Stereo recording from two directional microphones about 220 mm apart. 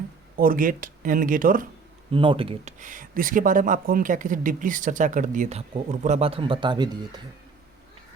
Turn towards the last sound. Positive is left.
turn(degrees=-20)  # may be behind; listen again after turning